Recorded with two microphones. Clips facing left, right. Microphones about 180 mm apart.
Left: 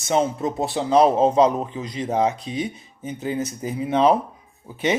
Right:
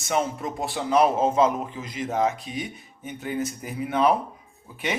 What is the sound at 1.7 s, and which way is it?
Speech, 25° left (ahead or behind).